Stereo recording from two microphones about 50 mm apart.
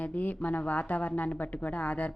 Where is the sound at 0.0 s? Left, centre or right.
Left.